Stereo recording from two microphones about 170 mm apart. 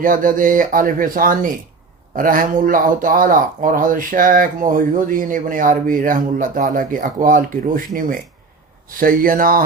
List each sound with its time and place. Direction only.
0.0 s speech: 55° right (ahead or behind)